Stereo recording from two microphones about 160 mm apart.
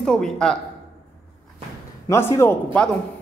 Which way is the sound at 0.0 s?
5° left (ahead or behind).